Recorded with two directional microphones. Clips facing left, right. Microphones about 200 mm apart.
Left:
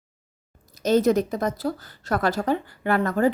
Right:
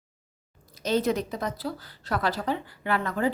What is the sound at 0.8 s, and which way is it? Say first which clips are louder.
A woman's voice: left 6 dB; 45° left (ahead or behind).